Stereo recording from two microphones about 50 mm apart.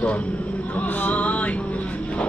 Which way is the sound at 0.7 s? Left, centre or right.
Left.